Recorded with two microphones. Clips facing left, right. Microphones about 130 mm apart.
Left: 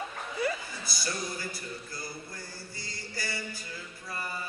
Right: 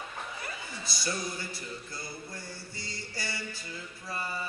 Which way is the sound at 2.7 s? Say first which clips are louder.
Left 1 dB; 25° right (ahead or behind).